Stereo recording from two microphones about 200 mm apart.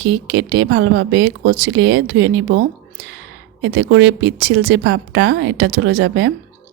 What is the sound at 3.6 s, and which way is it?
Speech, 60° right (ahead or behind).